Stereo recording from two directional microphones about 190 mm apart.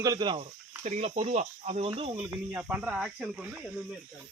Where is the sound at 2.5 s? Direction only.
10° right (ahead or behind).